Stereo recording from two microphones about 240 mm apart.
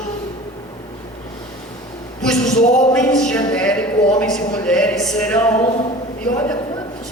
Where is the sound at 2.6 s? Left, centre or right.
Left.